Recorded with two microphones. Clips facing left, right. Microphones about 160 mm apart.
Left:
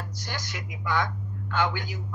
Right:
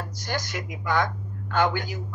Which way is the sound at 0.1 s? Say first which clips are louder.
Right 6 dB; 45° right (ahead or behind).